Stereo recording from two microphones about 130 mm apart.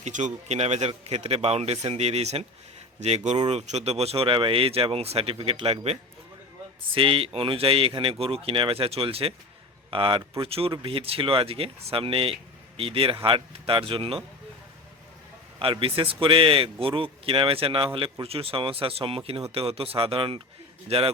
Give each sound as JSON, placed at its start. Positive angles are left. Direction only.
{"t": 0.0, "sound": "a man's voice", "side_deg": -70}
{"t": 15.5, "sound": "speech", "side_deg": -45}